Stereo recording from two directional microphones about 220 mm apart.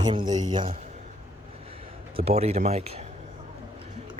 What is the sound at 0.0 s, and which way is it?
Speech, 20° right (ahead or behind).